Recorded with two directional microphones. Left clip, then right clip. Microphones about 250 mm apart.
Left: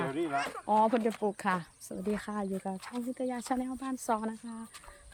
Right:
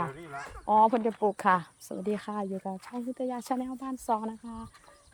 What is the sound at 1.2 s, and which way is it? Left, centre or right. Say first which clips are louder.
Speech: right 6 dB; centre.